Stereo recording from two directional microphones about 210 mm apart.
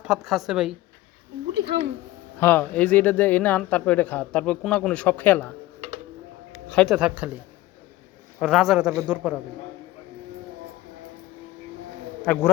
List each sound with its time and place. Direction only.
0.0 s a woman's voice: centre (ahead or behind)
1.5 s speech: 50° right (ahead or behind)
2.4 s speech: 10° left (ahead or behind)
6.7 s a woman's voice: centre (ahead or behind)
8.4 s a woman's voice: centre (ahead or behind)
12.2 s a man's voice: 5° left (ahead or behind)